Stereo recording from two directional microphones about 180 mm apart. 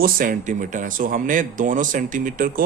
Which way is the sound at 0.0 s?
50° right (ahead or behind).